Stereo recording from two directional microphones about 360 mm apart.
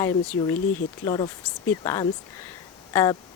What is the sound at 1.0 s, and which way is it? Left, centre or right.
Speech, centre.